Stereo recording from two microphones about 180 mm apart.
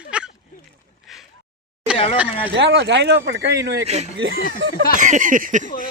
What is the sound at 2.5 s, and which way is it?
Speech, 75° right (ahead or behind).